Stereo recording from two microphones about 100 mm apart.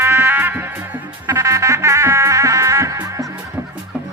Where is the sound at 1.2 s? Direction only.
30° right (ahead or behind).